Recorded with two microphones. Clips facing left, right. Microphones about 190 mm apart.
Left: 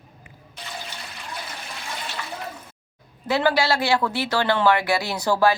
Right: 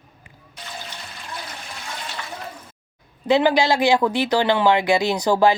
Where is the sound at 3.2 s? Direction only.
20° right (ahead or behind).